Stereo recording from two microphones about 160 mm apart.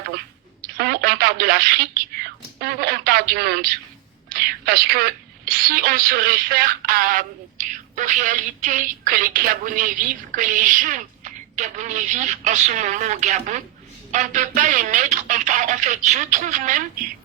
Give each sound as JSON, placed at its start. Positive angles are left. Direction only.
{"t": 0.8, "sound": "speech", "side_deg": -75}
{"t": 4.3, "sound": "a woman's voice", "side_deg": -70}